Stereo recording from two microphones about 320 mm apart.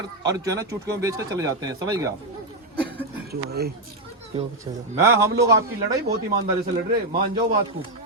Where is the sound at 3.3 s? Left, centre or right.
Right.